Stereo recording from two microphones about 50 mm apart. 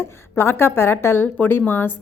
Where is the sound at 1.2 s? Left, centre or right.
Left.